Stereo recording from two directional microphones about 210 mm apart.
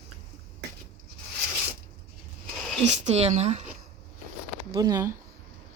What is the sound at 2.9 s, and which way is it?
Speech, 30° right (ahead or behind).